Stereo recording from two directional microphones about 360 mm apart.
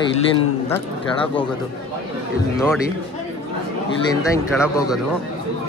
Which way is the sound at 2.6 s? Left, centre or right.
Centre.